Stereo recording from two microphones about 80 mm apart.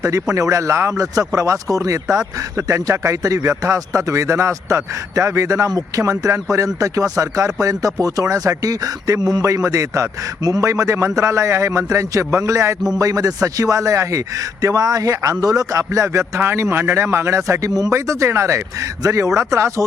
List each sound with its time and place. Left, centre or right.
0.0 s a man's voice: right